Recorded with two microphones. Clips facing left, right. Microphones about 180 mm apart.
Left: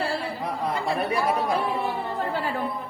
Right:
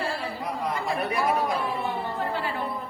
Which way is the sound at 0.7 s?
30° left (ahead or behind).